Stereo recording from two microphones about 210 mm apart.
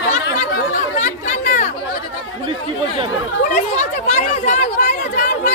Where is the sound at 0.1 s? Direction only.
35° left (ahead or behind).